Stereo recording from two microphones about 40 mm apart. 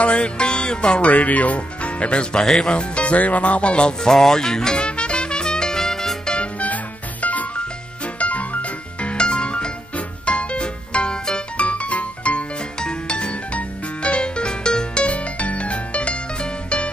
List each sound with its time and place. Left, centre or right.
0.0 s music: left
1.1 s speech: left
3.8 s music: centre
6.6 s music: left
9.0 s music: left
11.5 s music: left
15.0 s music: left